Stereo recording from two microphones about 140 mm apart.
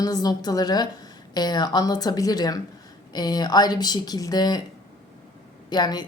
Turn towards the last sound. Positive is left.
turn(degrees=30)  # may be behind; listen again after turning